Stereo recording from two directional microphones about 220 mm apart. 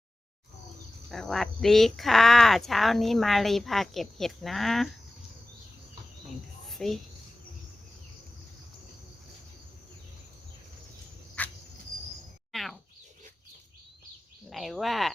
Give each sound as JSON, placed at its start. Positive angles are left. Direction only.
{"t": 1.1, "sound": "speech", "side_deg": 0}
{"t": 6.7, "sound": "a woman's voice", "side_deg": 0}
{"t": 11.4, "sound": "cricket", "side_deg": 5}
{"t": 12.5, "sound": "a sound", "side_deg": 0}
{"t": 14.5, "sound": "speech", "side_deg": 0}